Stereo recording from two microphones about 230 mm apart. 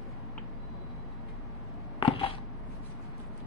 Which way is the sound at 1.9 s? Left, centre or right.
Left.